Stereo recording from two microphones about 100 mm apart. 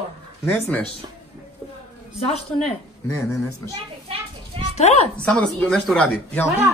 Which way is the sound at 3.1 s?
30° left (ahead or behind).